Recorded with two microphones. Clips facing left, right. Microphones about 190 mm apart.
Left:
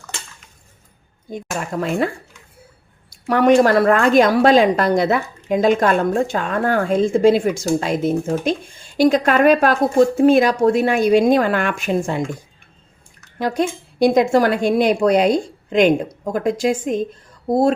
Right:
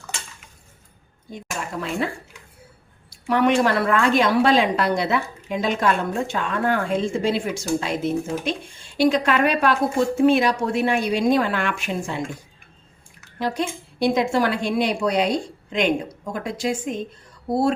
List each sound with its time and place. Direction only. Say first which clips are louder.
1.3 s a woman's voice: left 5 dB; 45° left (ahead or behind)
3.1 s a woman's voice: left 5 dB; 45° left (ahead or behind)
13.4 s a woman's voice: left 5 dB; 45° left (ahead or behind)